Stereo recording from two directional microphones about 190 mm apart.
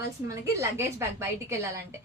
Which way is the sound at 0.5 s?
15° right (ahead or behind).